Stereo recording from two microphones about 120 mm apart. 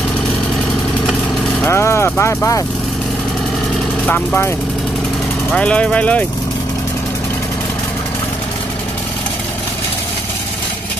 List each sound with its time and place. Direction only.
1.7 s speech: 20° left (ahead or behind)
4.0 s speech: 15° left (ahead or behind)
5.5 s speech: 10° left (ahead or behind)